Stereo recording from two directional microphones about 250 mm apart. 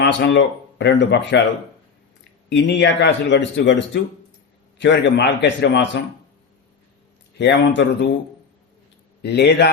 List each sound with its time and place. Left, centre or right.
0.0 s speech: left
2.5 s speech: left
7.3 s speech: left
9.2 s speech: left